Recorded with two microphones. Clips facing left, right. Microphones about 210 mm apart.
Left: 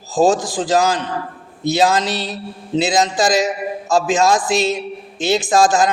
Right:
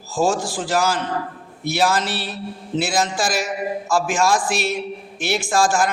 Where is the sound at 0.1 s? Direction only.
20° left (ahead or behind).